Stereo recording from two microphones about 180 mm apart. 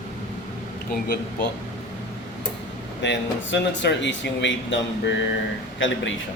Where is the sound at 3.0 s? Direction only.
80° left.